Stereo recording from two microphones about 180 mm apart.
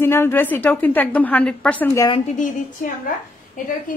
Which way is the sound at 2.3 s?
45° left (ahead or behind).